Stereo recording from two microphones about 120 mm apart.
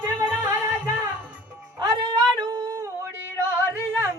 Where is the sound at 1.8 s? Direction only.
35° right (ahead or behind).